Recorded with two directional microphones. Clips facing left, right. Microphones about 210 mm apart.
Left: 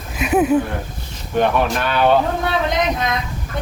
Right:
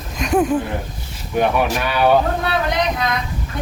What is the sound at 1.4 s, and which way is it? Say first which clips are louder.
Speech: even; 10° right (ahead or behind).